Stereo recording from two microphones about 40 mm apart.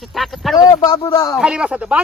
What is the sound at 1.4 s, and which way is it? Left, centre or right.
Speech, right.